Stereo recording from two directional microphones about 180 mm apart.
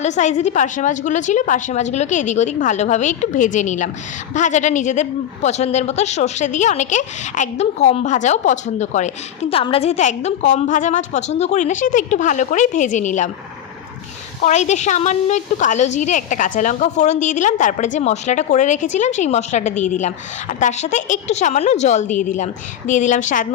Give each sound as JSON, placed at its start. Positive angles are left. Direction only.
{"t": 0.0, "sound": "a woman's voice", "side_deg": 40}
{"t": 14.4, "sound": "a woman's voice", "side_deg": 40}